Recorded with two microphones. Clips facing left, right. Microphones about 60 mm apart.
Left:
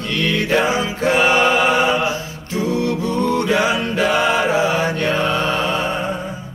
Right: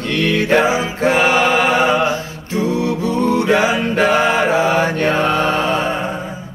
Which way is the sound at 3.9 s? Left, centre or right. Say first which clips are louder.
Right 3 dB; right.